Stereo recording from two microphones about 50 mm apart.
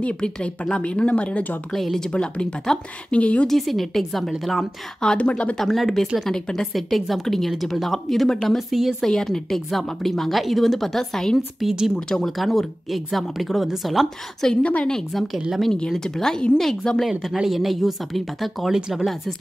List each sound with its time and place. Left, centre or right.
0.0 s speech: centre
1.7 s speech: centre
2.0 s speech: left
2.7 s a woman's voice: centre
3.1 s speech: left
3.4 s speech: centre
5.0 s speech: left
5.6 s speech: centre
9.0 s a woman's voice: centre
12.3 s speech: centre
14.4 s a woman's voice: centre
15.9 s a woman's voice: centre
17.2 s speech: centre
18.7 s speech: centre